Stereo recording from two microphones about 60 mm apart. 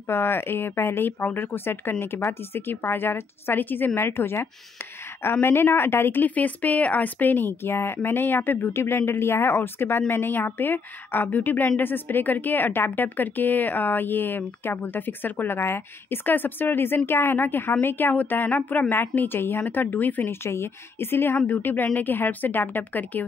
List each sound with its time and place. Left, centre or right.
0.0 s speech: left
6.2 s speech: left
20.2 s speech: left